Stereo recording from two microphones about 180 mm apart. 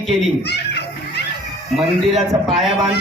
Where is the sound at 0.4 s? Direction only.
70° left (ahead or behind).